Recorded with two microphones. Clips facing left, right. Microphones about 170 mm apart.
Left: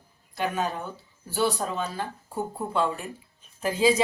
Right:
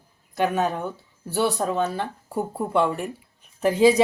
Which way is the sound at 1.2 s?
60° right (ahead or behind).